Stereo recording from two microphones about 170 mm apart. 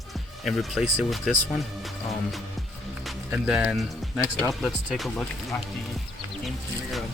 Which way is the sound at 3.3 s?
5° right (ahead or behind).